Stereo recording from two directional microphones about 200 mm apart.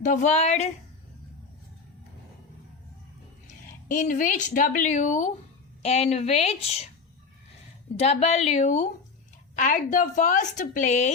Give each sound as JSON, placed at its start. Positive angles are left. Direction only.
{"t": 0.0, "sound": "a woman's voice", "side_deg": 35}
{"t": 3.4, "sound": "a woman's voice", "side_deg": 40}
{"t": 7.9, "sound": "a woman's voice", "side_deg": 35}